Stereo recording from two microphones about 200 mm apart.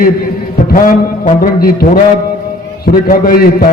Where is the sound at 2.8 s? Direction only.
45° left (ahead or behind).